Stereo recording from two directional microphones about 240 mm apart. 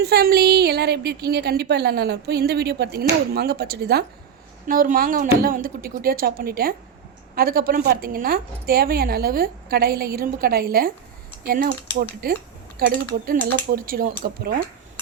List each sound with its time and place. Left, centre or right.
0.0 s a woman's voice: right